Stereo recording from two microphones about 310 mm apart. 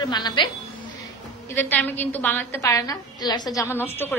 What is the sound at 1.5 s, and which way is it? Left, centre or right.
A woman's voice, centre.